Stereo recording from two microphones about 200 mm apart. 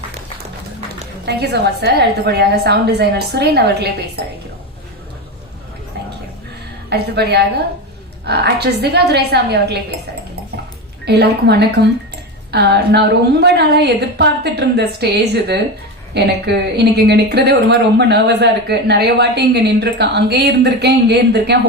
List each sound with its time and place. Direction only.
1.2 s speech: 55° right (ahead or behind)
6.9 s speech: 55° right (ahead or behind)
11.0 s speech: 55° right (ahead or behind)